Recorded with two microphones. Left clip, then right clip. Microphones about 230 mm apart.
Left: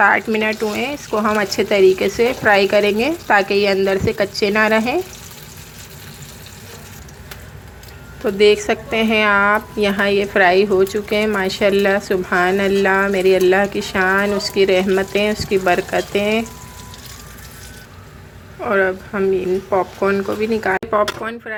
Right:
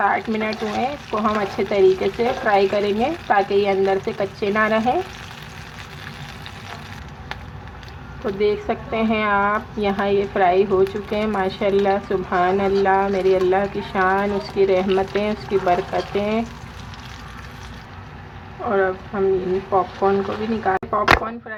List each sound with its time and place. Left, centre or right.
0.0 s a woman's voice: left
8.2 s a woman's voice: left
18.7 s a woman's voice: left